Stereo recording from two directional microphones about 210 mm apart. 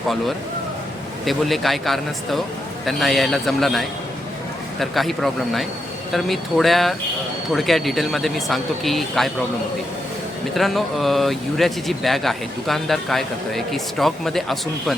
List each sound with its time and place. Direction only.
1.2 s speech: centre (ahead or behind)
10.5 s speech: centre (ahead or behind)